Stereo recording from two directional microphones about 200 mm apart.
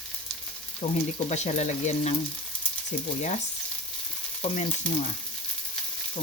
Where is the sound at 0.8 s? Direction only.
35° left (ahead or behind).